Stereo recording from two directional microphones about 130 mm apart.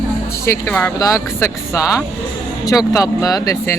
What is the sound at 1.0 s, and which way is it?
Speech, 20° left (ahead or behind).